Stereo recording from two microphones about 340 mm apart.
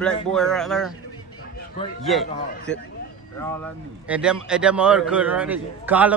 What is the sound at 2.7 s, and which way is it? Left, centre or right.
Speech, centre.